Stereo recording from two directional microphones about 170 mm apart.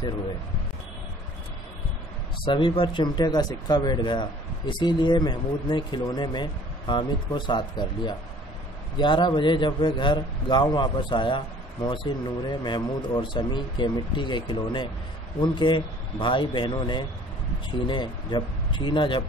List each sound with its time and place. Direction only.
2.4 s speech: 30° left (ahead or behind)